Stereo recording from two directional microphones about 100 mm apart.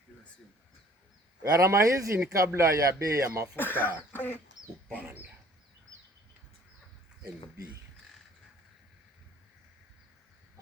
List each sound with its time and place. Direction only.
1.4 s speech: 30° right (ahead or behind)
3.5 s speech: 20° left (ahead or behind)
4.9 s chicken: 15° right (ahead or behind)